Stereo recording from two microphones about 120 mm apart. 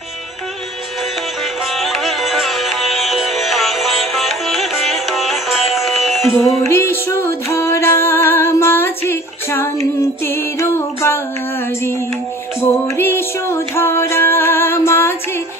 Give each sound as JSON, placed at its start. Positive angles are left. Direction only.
{"t": 1.7, "sound": "music", "side_deg": 0}
{"t": 6.3, "sound": "music", "side_deg": 20}
{"t": 12.5, "sound": "music", "side_deg": 20}